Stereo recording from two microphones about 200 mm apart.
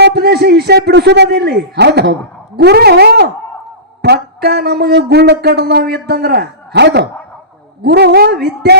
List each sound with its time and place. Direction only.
0.0 s speech: 55° right (ahead or behind)